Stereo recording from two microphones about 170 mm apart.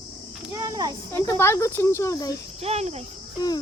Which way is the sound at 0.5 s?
25° right (ahead or behind).